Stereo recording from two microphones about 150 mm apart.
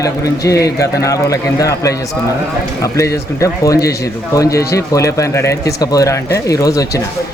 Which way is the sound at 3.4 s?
20° left (ahead or behind).